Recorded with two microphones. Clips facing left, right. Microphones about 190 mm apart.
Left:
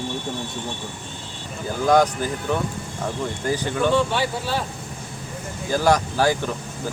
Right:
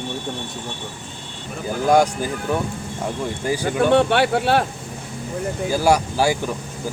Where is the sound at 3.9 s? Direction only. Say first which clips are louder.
Right 6 dB; 65° right (ahead or behind).